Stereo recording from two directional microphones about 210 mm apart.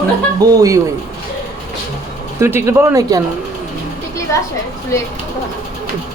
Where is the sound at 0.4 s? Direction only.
20° right (ahead or behind).